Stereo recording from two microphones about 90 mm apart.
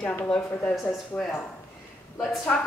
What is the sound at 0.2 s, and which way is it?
Speech, 15° left (ahead or behind).